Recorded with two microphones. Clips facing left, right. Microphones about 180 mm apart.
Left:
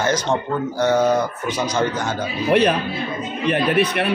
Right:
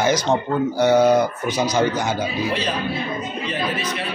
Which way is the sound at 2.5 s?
60° left (ahead or behind).